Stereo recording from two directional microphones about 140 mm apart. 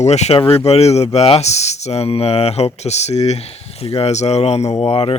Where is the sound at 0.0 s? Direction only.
50° left (ahead or behind).